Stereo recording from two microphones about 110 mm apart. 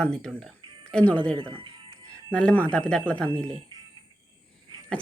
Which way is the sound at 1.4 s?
50° right (ahead or behind).